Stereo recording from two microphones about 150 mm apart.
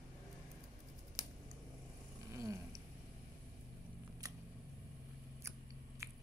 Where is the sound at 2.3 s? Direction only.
20° right (ahead or behind).